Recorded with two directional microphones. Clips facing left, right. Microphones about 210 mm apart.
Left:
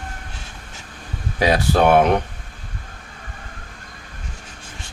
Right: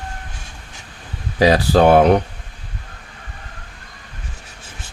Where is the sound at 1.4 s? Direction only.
35° right (ahead or behind).